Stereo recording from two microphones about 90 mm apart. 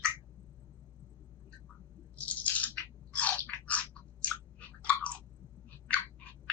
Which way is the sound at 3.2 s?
15° left (ahead or behind).